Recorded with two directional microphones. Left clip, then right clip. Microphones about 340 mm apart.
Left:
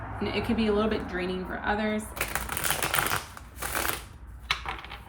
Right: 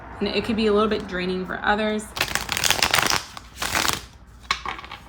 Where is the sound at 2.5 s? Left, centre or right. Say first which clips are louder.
Right 9 dB; right.